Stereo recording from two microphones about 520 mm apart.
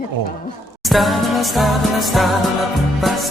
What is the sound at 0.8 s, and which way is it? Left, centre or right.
Music, centre.